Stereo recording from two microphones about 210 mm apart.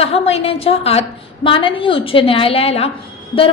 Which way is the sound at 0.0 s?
30° left (ahead or behind).